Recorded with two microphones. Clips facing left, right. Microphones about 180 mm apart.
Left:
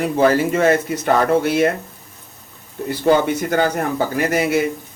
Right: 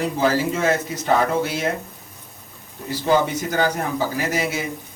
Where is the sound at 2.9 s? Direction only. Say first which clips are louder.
Left 4 dB; 60° left (ahead or behind).